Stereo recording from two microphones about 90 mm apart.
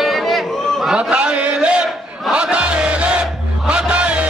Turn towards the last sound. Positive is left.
turn(degrees=-15)  # may be behind; listen again after turning